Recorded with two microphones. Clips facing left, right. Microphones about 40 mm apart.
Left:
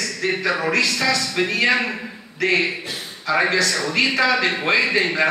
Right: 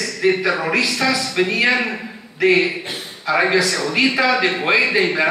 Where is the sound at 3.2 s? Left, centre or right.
Centre.